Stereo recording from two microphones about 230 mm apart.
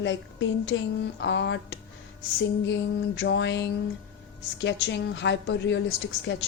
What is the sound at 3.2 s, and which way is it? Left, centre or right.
A woman's voice, left.